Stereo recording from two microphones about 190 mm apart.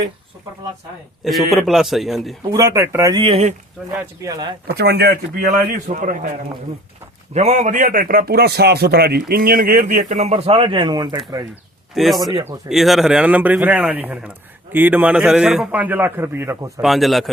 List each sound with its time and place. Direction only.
1.2 s a man's voice: centre (ahead or behind)
2.5 s speech: 15° right (ahead or behind)
4.2 s speech: 20° right (ahead or behind)
4.8 s speech: 60° right (ahead or behind)
5.9 s a man's voice: 40° right (ahead or behind)
7.3 s a man's voice: 40° right (ahead or behind); by 11.2 s 20° right (ahead or behind)
11.9 s a man's voice: centre (ahead or behind); by 16.8 s 15° right (ahead or behind)
16.8 s a man's voice: centre (ahead or behind)